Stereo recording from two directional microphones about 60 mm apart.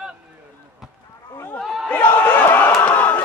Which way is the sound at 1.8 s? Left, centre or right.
Left.